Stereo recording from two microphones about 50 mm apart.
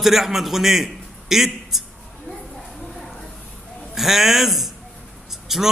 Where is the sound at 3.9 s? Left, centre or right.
Centre.